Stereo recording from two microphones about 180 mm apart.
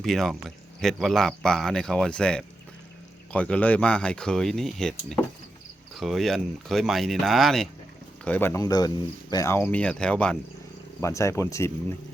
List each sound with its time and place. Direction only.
0.0 s speech: centre (ahead or behind)
11.0 s speech: 15° left (ahead or behind)